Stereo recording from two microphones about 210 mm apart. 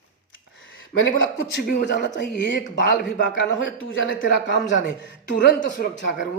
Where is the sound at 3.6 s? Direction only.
65° left (ahead or behind).